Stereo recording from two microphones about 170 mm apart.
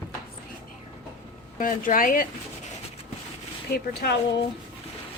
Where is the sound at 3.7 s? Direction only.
70° left (ahead or behind).